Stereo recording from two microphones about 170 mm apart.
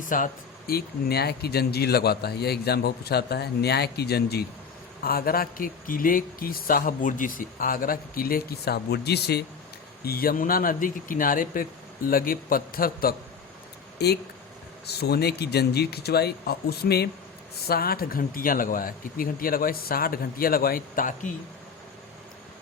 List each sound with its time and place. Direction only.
0.1 s speech: 55° left (ahead or behind)
0.7 s speech: 65° left (ahead or behind)
5.0 s a man's voice: 60° left (ahead or behind)
10.0 s a man's voice: 60° left (ahead or behind)
14.0 s a man's voice: 75° left (ahead or behind); by 21.3 s 50° left (ahead or behind)